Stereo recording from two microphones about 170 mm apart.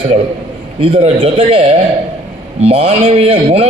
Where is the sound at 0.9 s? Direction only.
40° right (ahead or behind).